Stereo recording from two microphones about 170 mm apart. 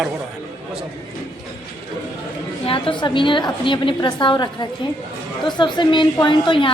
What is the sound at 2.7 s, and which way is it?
A woman's voice, 30° left (ahead or behind).